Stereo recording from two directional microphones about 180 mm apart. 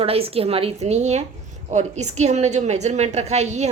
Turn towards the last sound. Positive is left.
turn(degrees=-40)  # may be behind; listen again after turning